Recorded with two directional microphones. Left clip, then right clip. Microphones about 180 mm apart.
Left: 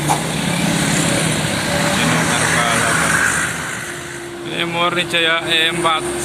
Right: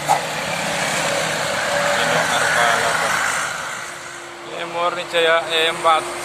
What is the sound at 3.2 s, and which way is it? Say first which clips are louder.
Vehicle: left 4 dB; 55° right (ahead or behind).